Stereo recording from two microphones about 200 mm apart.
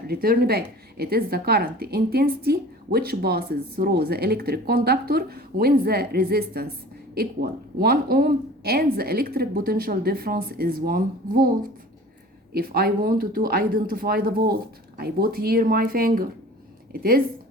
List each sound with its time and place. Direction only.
0.1 s a woman's voice: 50° right (ahead or behind)
12.5 s a woman's voice: 50° right (ahead or behind)